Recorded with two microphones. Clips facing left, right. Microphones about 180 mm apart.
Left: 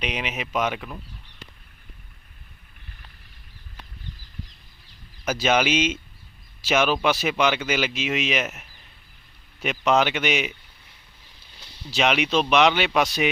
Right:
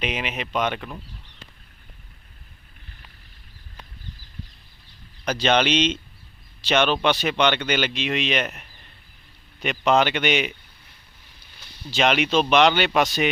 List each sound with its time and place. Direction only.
0.0 s speech: centre (ahead or behind)
5.2 s speech: 5° left (ahead or behind)
11.5 s a sound: 25° left (ahead or behind)
11.9 s speech: centre (ahead or behind)